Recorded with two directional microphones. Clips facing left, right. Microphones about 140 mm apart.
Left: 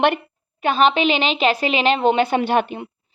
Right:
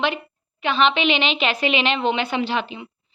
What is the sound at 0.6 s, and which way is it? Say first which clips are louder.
A woman's voice: left 3 dB; 45° left (ahead or behind).